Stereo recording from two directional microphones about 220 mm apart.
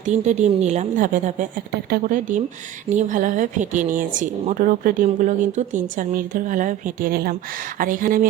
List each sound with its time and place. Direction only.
0.0 s speech: 30° right (ahead or behind)